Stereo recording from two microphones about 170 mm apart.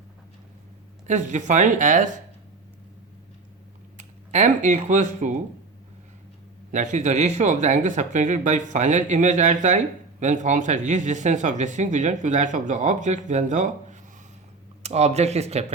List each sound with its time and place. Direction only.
1.0 s speech: 45° right (ahead or behind)
3.9 s speech: 45° right (ahead or behind)
6.7 s speech: 45° right (ahead or behind)